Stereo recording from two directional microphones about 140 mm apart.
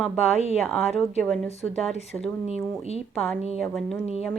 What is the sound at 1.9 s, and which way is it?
Speech, 45° left (ahead or behind).